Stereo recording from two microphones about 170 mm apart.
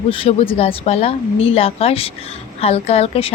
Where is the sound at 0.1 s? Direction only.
35° left (ahead or behind).